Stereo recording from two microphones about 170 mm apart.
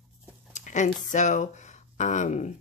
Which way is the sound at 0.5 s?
45° left (ahead or behind).